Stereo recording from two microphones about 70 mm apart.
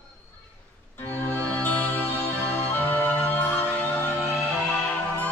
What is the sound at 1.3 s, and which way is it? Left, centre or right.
Music, left.